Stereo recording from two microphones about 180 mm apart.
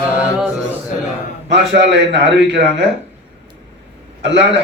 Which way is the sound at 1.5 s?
75° right (ahead or behind).